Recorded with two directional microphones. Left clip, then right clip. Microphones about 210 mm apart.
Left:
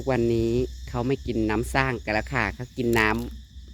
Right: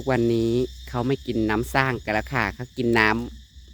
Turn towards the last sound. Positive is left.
turn(degrees=-20)  # may be behind; listen again after turning